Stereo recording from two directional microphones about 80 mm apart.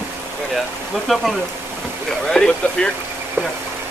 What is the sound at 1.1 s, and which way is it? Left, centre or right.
Speech, centre.